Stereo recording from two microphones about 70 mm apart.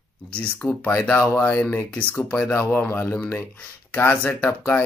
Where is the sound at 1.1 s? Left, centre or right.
Left.